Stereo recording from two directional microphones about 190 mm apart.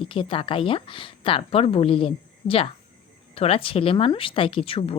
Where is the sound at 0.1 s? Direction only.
30° left (ahead or behind).